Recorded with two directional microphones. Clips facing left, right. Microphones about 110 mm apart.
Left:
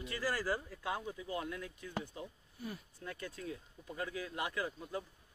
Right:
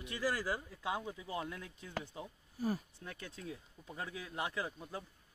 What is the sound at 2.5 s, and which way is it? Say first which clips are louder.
Speech: right 10 dB; 35° right (ahead or behind).